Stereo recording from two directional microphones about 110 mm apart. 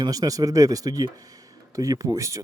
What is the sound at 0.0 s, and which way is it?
Speech, 35° right (ahead or behind).